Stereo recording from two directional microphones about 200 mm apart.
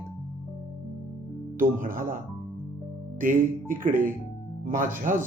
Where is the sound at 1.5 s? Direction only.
40° right (ahead or behind).